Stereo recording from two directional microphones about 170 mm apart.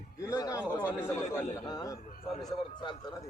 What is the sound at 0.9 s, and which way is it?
A man's voice, 15° left (ahead or behind).